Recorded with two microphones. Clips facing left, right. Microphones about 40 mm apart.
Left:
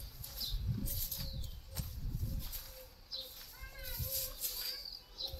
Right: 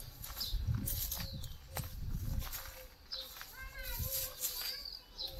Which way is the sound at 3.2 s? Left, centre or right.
Right.